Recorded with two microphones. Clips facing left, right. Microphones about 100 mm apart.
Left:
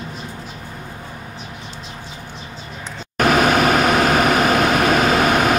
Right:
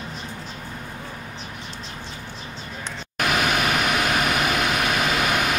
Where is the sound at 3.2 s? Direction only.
45° left (ahead or behind).